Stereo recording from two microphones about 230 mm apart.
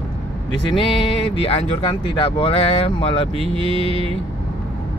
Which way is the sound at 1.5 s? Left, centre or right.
Left.